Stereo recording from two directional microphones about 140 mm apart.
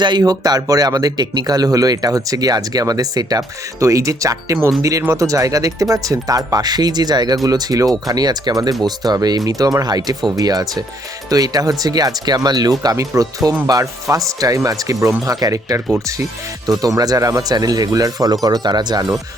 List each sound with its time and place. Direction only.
0.0 s speech: 30° right (ahead or behind)